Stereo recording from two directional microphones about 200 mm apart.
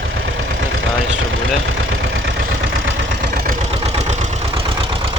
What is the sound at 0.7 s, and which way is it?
Vehicle, 75° right (ahead or behind).